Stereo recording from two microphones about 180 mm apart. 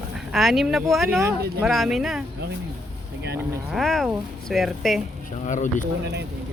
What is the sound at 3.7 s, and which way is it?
Speech, centre (ahead or behind).